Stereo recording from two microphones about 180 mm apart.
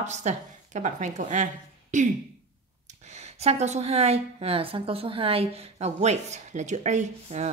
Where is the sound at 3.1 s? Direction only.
35° right (ahead or behind).